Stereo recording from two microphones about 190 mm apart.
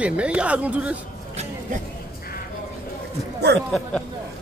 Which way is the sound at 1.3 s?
35° right (ahead or behind).